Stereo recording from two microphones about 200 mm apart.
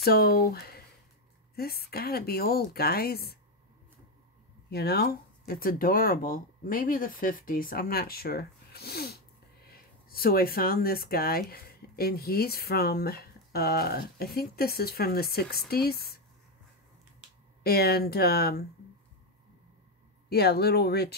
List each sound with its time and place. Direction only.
0.0 s speech: 50° left (ahead or behind)
4.6 s speech: 55° left (ahead or behind)
17.6 s speech: 50° left (ahead or behind)
20.2 s speech: 55° left (ahead or behind)